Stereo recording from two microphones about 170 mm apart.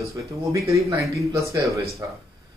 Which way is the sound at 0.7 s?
20° right (ahead or behind).